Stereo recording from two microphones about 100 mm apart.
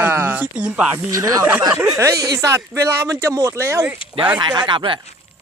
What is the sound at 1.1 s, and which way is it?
Speech, 35° right (ahead or behind).